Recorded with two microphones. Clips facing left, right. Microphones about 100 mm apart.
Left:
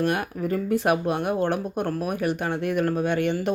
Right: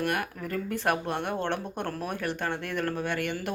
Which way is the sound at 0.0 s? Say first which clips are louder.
Left 5 dB; 20° left (ahead or behind).